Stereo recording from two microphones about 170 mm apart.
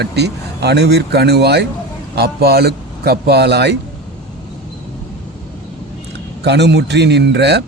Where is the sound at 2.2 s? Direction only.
65° right (ahead or behind).